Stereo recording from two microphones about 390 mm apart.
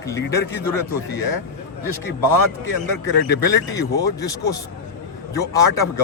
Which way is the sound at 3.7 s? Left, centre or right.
Centre.